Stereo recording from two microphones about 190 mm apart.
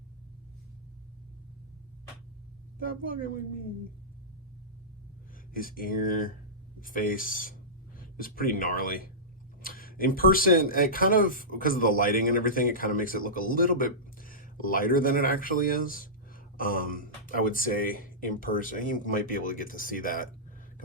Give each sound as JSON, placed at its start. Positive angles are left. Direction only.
{"t": 2.8, "sound": "speech", "side_deg": 45}
{"t": 5.5, "sound": "speech", "side_deg": 50}